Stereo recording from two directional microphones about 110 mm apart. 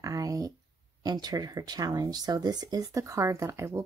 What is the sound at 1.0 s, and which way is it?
Speech, 40° right (ahead or behind).